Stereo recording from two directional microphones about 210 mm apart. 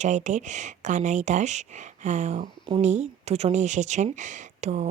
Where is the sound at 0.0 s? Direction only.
35° right (ahead or behind).